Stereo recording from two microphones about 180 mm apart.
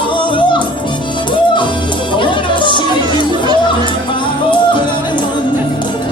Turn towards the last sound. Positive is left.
turn(degrees=25)  # may be behind; listen again after turning